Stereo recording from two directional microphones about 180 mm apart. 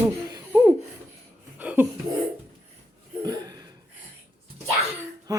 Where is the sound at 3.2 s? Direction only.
20° right (ahead or behind).